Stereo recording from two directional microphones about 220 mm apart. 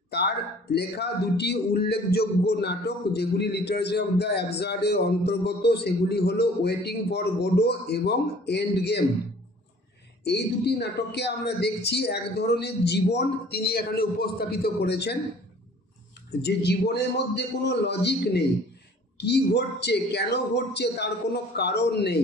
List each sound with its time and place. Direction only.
0.1 s speech: 50° left (ahead or behind)
10.2 s speech: 50° left (ahead or behind)
16.3 s speech: 50° left (ahead or behind)